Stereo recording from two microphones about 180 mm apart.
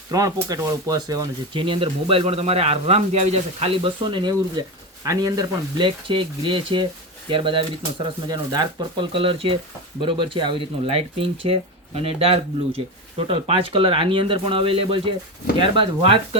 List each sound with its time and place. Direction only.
0.1 s speech: 20° right (ahead or behind)